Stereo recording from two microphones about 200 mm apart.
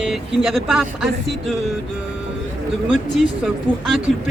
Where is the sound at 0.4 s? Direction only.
Centre (ahead or behind).